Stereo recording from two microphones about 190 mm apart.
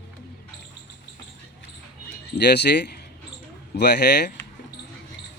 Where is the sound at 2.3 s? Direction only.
60° left (ahead or behind).